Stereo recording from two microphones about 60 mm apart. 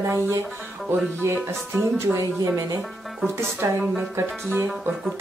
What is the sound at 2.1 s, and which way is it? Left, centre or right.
Speech, centre.